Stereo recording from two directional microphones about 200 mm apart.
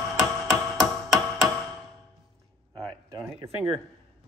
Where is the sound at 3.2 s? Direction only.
25° right (ahead or behind).